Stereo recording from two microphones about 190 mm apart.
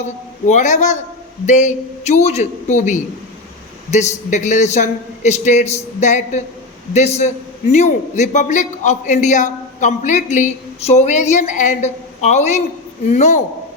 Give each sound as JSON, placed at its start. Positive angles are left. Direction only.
{"t": 0.0, "sound": "a man's voice", "side_deg": 40}